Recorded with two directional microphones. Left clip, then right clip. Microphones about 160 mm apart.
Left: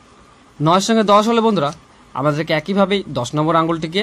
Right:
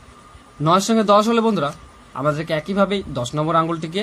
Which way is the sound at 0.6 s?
25° left (ahead or behind).